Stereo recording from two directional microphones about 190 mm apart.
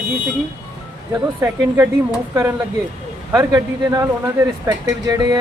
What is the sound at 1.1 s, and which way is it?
Speech, 15° right (ahead or behind).